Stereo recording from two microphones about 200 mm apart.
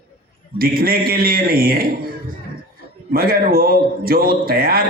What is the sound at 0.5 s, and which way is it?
Speech, 45° right (ahead or behind).